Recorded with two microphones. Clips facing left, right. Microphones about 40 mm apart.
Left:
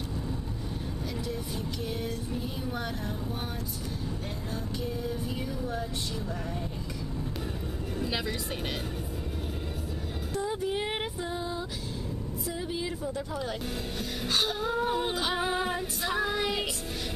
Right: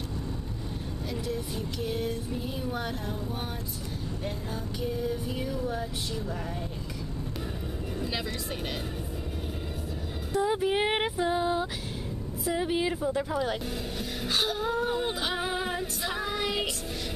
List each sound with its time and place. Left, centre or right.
1.9 s female singing: centre
5.6 s female singing: centre
10.4 s music: right
11.2 s a sound: right
12.5 s speech: right
13.0 s speech: right
14.2 s female singing: centre